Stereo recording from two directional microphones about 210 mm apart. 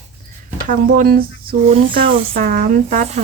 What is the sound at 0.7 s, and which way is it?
Speech, 40° right (ahead or behind).